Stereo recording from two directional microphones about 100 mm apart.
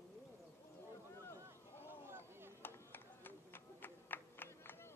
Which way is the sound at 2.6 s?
20° left (ahead or behind).